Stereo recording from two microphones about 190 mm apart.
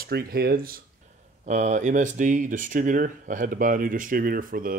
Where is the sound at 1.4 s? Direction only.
40° right (ahead or behind).